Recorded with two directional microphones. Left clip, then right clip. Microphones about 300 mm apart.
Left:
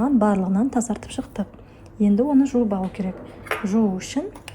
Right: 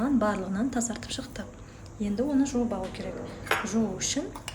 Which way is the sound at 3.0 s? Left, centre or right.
Left.